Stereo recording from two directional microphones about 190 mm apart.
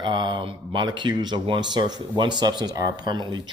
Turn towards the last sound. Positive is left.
turn(degrees=-25)  # may be behind; listen again after turning